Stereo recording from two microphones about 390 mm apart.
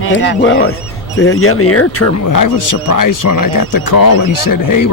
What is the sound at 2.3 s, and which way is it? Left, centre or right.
Speech, left.